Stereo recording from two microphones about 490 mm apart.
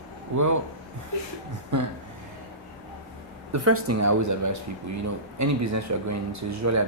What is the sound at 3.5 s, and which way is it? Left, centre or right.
Speech, right.